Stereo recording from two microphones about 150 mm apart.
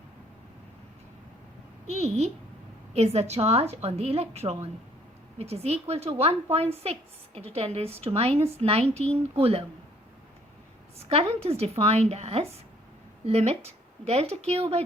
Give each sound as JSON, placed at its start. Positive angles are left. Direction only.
{"t": 1.9, "sound": "a woman's voice", "side_deg": -45}
{"t": 10.9, "sound": "a woman's voice", "side_deg": -40}